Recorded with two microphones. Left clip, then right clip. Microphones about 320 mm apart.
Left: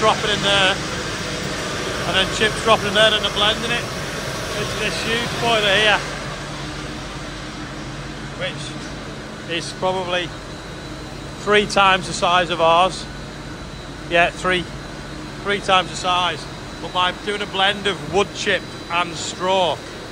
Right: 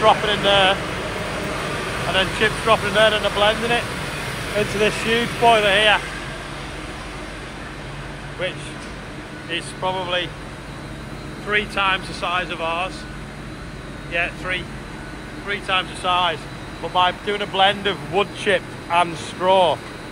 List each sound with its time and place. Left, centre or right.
0.0 s speech: centre
2.1 s speech: centre
4.8 s speech: centre
9.6 s speech: centre
11.5 s speech: left
14.1 s speech: left
16.1 s speech: centre